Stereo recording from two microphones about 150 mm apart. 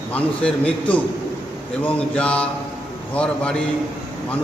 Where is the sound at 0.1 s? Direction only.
10° left (ahead or behind).